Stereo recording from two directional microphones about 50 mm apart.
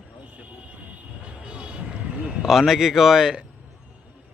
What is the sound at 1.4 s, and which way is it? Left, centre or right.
Vehicle, right.